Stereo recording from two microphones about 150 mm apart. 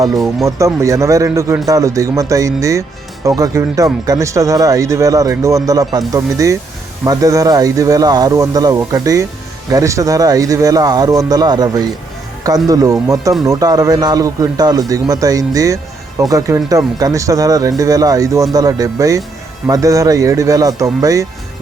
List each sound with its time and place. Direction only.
0.1 s speech: centre (ahead or behind)
0.4 s a man's voice: 20° right (ahead or behind)